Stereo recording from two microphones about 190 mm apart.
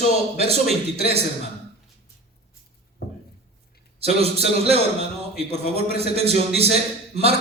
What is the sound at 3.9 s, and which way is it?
A man's voice, 30° right (ahead or behind).